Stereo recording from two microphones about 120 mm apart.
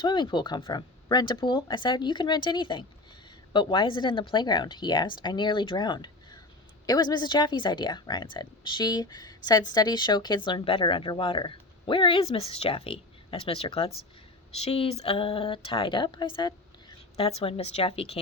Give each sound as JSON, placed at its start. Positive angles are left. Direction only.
{"t": 0.0, "sound": "speech", "side_deg": 40}
{"t": 17.2, "sound": "a woman's voice", "side_deg": 50}